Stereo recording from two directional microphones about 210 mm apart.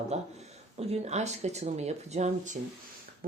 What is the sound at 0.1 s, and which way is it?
Speech, 30° right (ahead or behind).